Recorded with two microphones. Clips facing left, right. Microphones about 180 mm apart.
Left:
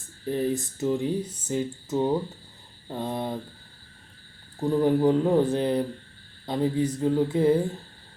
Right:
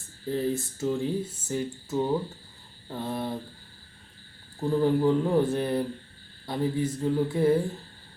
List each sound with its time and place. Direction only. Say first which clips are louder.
0.3 s speech: left 2 dB; 20° left (ahead or behind)
4.7 s speech: left 2 dB; 15° left (ahead or behind)